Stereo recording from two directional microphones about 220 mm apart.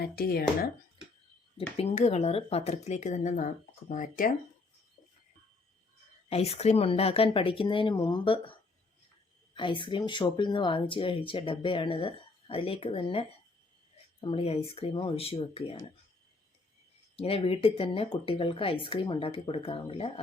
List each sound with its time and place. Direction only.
0.0 s speech: 45° left (ahead or behind)
1.5 s speech: 25° left (ahead or behind)
6.3 s speech: 30° left (ahead or behind)
9.6 s speech: 20° left (ahead or behind)
17.2 s speech: 25° left (ahead or behind)